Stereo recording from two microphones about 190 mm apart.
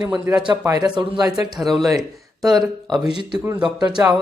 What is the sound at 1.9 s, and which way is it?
Speech, 20° right (ahead or behind).